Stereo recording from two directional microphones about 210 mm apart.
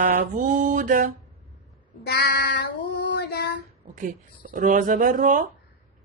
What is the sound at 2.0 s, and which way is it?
Child singing, 50° left (ahead or behind).